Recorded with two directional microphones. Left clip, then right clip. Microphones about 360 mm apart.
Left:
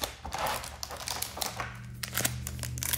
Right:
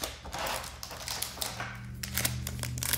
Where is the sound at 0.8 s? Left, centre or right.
Centre.